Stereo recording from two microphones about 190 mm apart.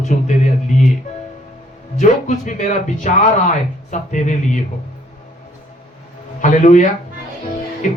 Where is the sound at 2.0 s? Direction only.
40° left (ahead or behind).